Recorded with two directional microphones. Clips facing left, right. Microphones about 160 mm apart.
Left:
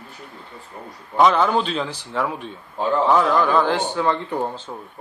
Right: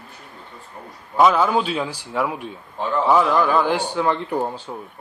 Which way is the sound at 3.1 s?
10° right (ahead or behind).